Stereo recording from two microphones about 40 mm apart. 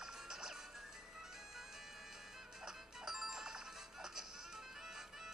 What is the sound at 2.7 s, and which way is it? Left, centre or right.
Music, centre.